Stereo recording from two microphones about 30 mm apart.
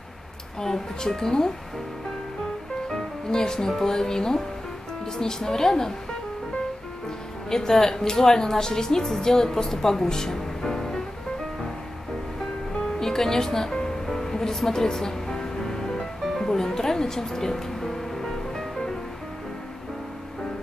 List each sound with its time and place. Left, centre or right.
0.6 s a woman's voice: centre
2.9 s a woman's voice: left
7.4 s a woman's voice: centre
13.0 s speech: centre
13.8 s music: centre